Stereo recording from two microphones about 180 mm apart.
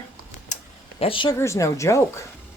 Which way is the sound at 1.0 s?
30° left (ahead or behind).